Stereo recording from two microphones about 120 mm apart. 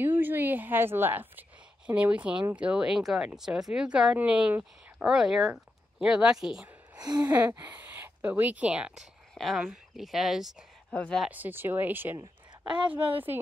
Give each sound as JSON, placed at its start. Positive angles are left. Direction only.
{"t": 0.0, "sound": "speech", "side_deg": -15}
{"t": 7.0, "sound": "a sound", "side_deg": -35}
{"t": 7.2, "sound": "speech", "side_deg": -15}
{"t": 9.3, "sound": "speech", "side_deg": 0}
{"t": 11.2, "sound": "speech", "side_deg": -15}
{"t": 12.2, "sound": "a sound", "side_deg": -40}
{"t": 13.1, "sound": "speech", "side_deg": -15}